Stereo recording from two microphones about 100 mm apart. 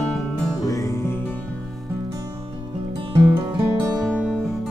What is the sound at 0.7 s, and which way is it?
Music, 30° left (ahead or behind).